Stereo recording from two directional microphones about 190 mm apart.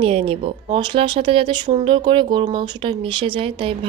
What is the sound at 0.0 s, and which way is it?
Speech, 30° right (ahead or behind).